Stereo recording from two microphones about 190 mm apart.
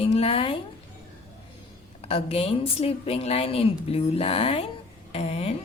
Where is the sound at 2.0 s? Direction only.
30° left (ahead or behind).